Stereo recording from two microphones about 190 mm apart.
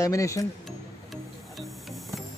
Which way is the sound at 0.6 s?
Centre (ahead or behind).